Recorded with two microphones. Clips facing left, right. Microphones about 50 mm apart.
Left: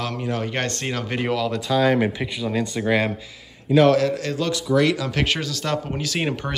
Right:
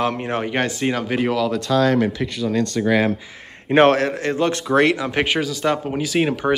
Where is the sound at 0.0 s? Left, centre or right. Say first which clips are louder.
Right 4 dB; right.